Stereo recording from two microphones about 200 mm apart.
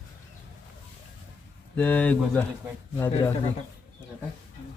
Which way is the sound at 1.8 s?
10° left (ahead or behind).